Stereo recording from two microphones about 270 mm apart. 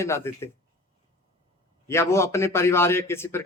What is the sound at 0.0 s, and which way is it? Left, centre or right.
Speech, centre.